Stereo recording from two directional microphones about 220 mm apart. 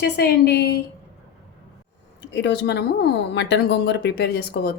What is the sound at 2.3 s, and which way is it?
A woman's voice, 50° left (ahead or behind).